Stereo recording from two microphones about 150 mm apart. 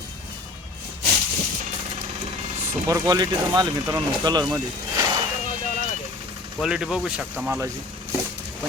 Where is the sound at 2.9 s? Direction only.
25° right (ahead or behind).